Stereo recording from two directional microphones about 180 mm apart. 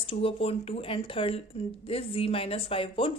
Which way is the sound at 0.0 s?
30° left (ahead or behind).